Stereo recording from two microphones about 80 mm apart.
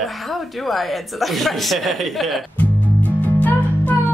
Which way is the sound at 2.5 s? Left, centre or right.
Centre.